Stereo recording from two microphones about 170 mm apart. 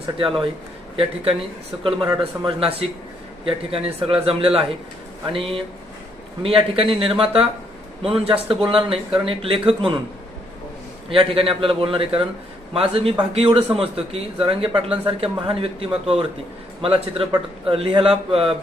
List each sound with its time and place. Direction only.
0.9 s speech: 35° right (ahead or behind)
11.1 s speech: 30° right (ahead or behind)